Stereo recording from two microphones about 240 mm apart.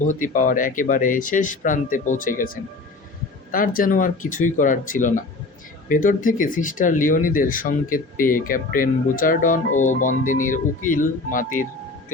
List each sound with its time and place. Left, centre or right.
0.0 s speech: left